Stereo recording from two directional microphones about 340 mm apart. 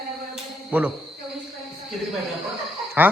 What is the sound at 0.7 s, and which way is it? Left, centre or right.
Speech, centre.